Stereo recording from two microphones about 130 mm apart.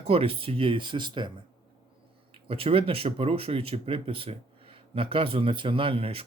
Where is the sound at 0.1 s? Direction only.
45° right (ahead or behind).